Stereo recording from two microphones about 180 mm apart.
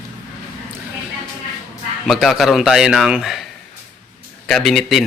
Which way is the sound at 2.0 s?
Centre (ahead or behind).